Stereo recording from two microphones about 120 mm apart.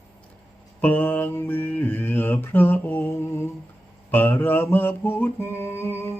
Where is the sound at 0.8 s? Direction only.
15° left (ahead or behind).